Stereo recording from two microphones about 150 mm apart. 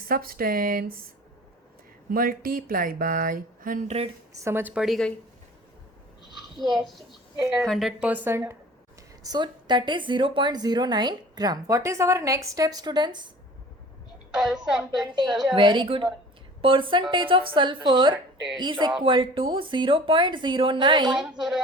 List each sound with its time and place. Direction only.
0.0 s speech: 80° right
2.0 s speech: 70° right (ahead or behind)
4.4 s speech: 15° right (ahead or behind)
4.7 s a woman's voice: centre (ahead or behind)
6.6 s a woman's voice: centre (ahead or behind)
9.2 s a woman's voice: 30° right (ahead or behind)
14.3 s a woman's voice: 5° right (ahead or behind)
15.5 s speech: 30° right (ahead or behind)
21.2 s a woman's voice: 5° right (ahead or behind)